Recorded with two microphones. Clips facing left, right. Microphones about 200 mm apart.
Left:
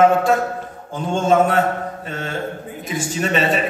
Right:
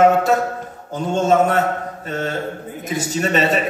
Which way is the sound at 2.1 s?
40° right (ahead or behind).